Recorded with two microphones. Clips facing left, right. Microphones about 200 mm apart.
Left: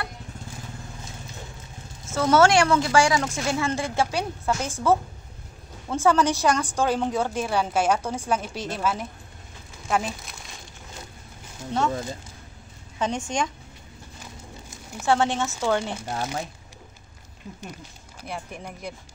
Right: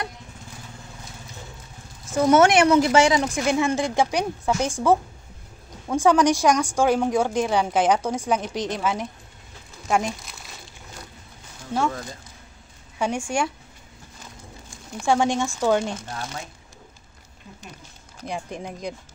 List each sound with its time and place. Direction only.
2.0 s a woman's voice: 15° right (ahead or behind)
9.8 s crumpling: 5° right (ahead or behind)
11.9 s speech: 25° left (ahead or behind)
13.0 s a woman's voice: 10° right (ahead or behind)
15.0 s a woman's voice: 15° right (ahead or behind)
18.2 s a woman's voice: 15° right (ahead or behind)